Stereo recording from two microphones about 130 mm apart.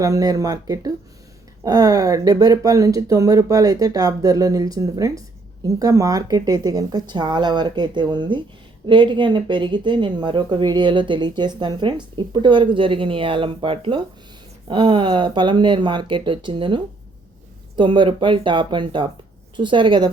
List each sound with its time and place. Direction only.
0.0 s speech: 25° right (ahead or behind)